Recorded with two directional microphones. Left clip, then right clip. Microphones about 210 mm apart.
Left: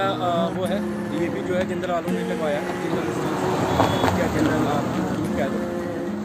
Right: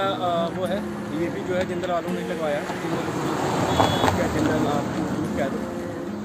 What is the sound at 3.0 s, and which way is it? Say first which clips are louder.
Vehicle: left 1 dB; 45° right (ahead or behind).